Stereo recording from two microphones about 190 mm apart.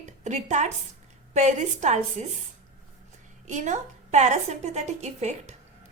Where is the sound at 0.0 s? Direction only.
40° right (ahead or behind).